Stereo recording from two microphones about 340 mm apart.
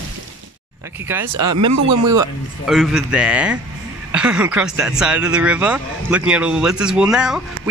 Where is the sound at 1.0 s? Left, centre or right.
Centre.